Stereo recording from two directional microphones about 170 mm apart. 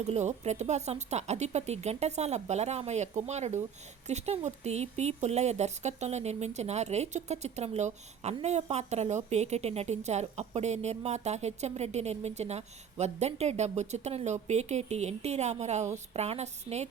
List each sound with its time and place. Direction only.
0.0 s a woman's voice: 45° right (ahead or behind)